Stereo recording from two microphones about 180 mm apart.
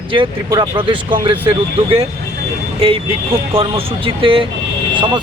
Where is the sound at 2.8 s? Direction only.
30° right (ahead or behind).